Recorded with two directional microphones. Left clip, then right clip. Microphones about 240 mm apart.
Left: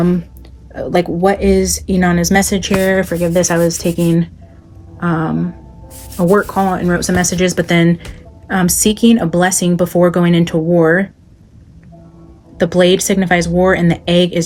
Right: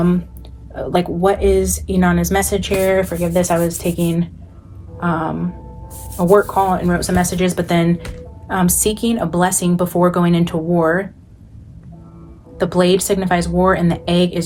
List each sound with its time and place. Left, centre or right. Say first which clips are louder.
0.7 s speech: left 3 dB; left
4.9 s music: left 2 dB; left
6.1 s speech: even; left
12.5 s speech: left 4 dB; left